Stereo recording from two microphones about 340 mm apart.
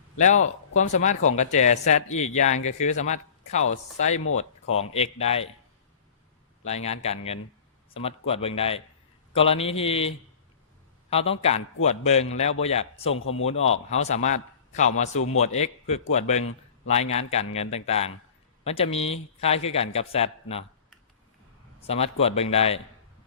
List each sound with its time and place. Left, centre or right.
0.2 s speech: left
4.6 s speech: left
4.9 s a man's voice: centre
6.7 s a man's voice: centre
11.1 s a man's voice: centre
13.1 s speech: left
13.4 s a man's voice: centre
21.8 s a man's voice: centre